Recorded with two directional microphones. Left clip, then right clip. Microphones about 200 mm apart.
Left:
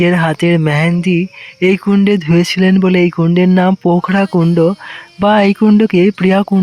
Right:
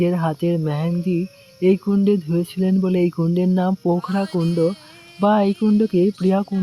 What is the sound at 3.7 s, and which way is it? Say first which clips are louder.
Speech: left 8 dB; 25° left (ahead or behind).